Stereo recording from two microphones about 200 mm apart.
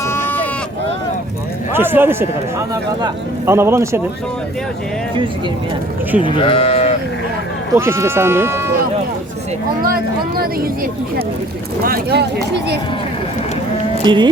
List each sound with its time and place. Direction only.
0.0 s sheep: 10° left (ahead or behind)
1.7 s a man's voice: 10° right (ahead or behind)
6.2 s speech: 25° left (ahead or behind)
7.7 s a man's voice: 15° right (ahead or behind)
9.8 s speech: 50° right (ahead or behind)
11.8 s speech: 50° right (ahead or behind)
14.0 s speech: 20° right (ahead or behind)